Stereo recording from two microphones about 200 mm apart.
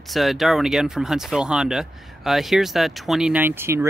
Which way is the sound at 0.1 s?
Centre (ahead or behind).